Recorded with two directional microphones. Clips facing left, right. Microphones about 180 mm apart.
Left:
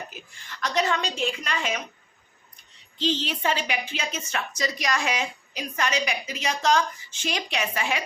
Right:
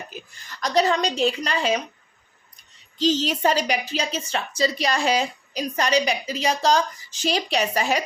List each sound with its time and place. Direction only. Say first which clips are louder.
0.1 s a woman's voice: right 4 dB; 40° right (ahead or behind)
3.0 s a woman's voice: right 6 dB; 40° right (ahead or behind)